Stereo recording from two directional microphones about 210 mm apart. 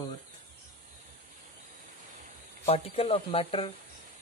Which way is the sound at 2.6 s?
30° left (ahead or behind).